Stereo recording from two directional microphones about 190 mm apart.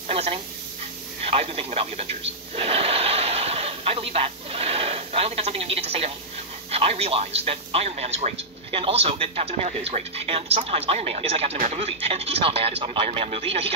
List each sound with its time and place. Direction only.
0.1 s a sound: 30° right (ahead or behind)
1.2 s radio: 30° right (ahead or behind)
6.7 s speech: 30° right (ahead or behind)